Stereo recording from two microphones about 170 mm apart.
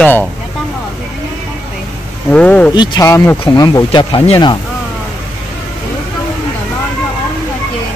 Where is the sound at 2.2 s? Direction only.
5° left (ahead or behind).